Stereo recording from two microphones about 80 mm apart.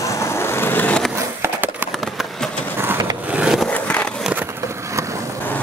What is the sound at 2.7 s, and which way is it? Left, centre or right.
Vehicle, right.